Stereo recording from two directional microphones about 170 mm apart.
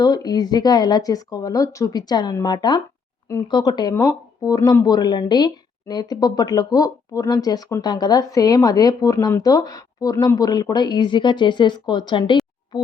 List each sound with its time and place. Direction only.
0.0 s speech: 25° left (ahead or behind)
12.7 s music: 25° left (ahead or behind)